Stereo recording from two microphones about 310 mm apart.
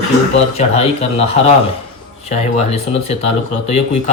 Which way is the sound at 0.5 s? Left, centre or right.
Centre.